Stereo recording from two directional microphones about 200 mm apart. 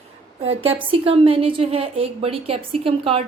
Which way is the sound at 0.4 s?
30° right (ahead or behind).